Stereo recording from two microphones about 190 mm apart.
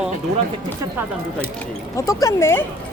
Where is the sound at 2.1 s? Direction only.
15° left (ahead or behind).